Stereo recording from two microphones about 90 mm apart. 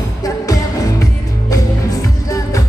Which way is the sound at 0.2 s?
40° left (ahead or behind).